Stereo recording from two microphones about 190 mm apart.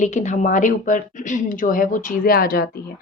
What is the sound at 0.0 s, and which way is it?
A woman's voice, 40° left (ahead or behind).